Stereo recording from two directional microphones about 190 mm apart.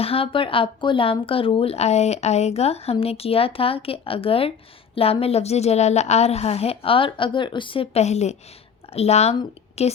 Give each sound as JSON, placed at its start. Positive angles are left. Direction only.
{"t": 0.0, "sound": "a woman's voice", "side_deg": 30}